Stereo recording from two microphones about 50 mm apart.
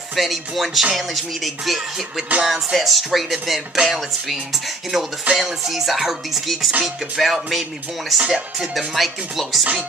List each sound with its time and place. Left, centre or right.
0.1 s speech: centre
3.7 s speech: centre
4.3 s speech: centre
5.3 s music: right
5.7 s speech: centre
8.2 s speech: centre
8.7 s speech: centre